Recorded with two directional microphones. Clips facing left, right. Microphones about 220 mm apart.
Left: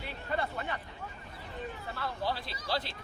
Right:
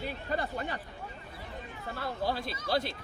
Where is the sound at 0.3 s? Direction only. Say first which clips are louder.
Even; 40° right (ahead or behind).